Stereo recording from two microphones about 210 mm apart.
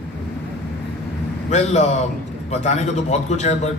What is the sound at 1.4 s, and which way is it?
Speech, 35° left (ahead or behind).